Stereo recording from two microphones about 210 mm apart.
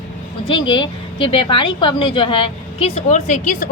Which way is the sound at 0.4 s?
20° left (ahead or behind).